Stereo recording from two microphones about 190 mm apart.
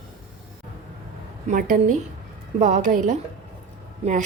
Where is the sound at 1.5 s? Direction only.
45° right (ahead or behind).